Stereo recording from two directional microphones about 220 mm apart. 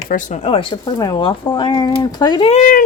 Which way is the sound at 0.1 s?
35° left (ahead or behind).